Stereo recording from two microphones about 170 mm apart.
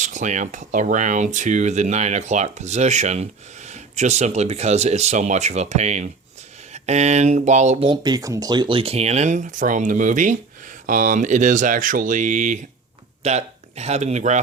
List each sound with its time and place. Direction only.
0.0 s speech: 45° right (ahead or behind)
7.9 s speech: 25° right (ahead or behind); by 14.4 s 45° right (ahead or behind)